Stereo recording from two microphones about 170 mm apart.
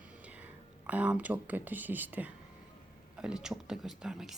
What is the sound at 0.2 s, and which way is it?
Speech, 10° right (ahead or behind).